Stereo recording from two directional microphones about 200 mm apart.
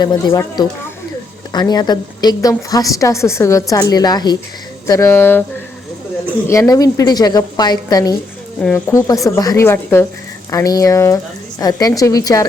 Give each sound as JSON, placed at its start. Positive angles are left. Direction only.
{"t": 0.0, "sound": "a woman's voice", "side_deg": 20}
{"t": 6.5, "sound": "a woman's voice", "side_deg": 15}